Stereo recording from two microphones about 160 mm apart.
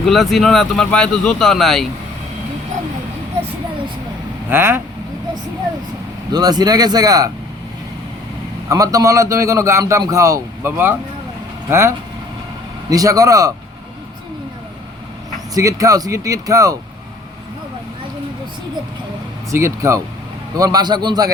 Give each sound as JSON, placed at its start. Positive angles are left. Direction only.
{"t": 0.0, "sound": "speech", "side_deg": 0}
{"t": 4.4, "sound": "speech", "side_deg": -15}
{"t": 6.3, "sound": "a man's voice", "side_deg": -25}
{"t": 8.7, "sound": "a man's voice", "side_deg": -20}
{"t": 15.5, "sound": "a man's voice", "side_deg": -20}
{"t": 19.5, "sound": "a man's voice", "side_deg": -20}